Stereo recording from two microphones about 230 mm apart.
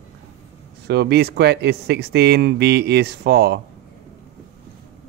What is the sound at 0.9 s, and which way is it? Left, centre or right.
Speech, right.